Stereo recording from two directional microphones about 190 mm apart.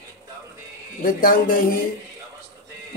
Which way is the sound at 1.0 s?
50° left (ahead or behind).